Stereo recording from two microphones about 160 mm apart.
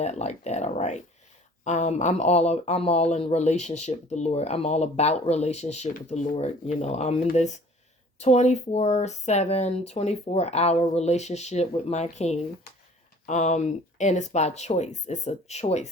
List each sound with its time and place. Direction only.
0.0 s speech: 45° left (ahead or behind)